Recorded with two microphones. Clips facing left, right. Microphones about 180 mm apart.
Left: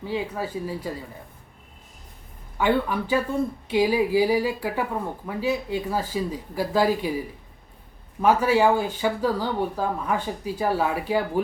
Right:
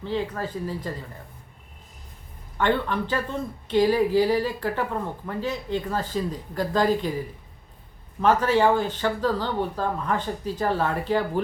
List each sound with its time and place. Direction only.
0.0 s speech: 10° left (ahead or behind)
2.6 s speech: 10° left (ahead or behind)
8.2 s speech: 10° left (ahead or behind)